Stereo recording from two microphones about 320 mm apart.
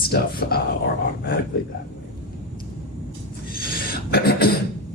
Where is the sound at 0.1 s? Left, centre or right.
Left.